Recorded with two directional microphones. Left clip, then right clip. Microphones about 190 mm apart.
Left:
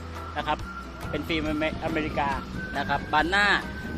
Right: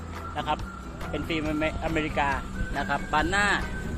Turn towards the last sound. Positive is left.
turn(degrees=15)  # may be behind; listen again after turning